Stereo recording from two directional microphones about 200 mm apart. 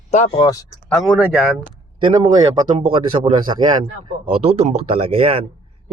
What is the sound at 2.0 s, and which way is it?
Speech, 25° right (ahead or behind).